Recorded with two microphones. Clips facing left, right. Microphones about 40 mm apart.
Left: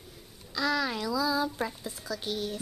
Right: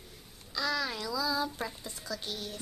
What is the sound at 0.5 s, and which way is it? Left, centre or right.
A child's voice, centre.